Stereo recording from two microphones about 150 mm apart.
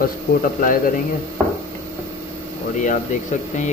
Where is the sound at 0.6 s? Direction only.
65° left (ahead or behind).